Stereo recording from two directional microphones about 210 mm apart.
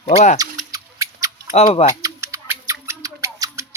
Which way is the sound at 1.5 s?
30° left (ahead or behind).